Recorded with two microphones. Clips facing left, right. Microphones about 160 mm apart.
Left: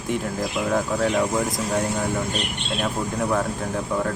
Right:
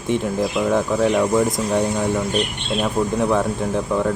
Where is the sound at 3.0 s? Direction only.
35° right (ahead or behind).